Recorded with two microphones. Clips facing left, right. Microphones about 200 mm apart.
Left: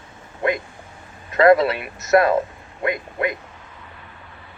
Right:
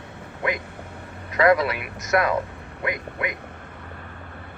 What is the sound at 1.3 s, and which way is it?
Speech, 25° left (ahead or behind).